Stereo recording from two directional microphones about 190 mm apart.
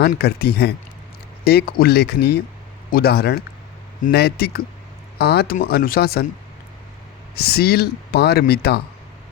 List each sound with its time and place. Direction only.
0.1 s speech: 55° left (ahead or behind)
7.3 s speech: 55° left (ahead or behind)